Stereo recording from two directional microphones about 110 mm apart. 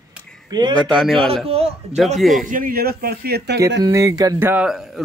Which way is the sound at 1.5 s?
65° right (ahead or behind).